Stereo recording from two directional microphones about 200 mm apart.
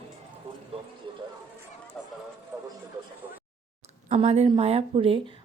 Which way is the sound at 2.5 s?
15° right (ahead or behind).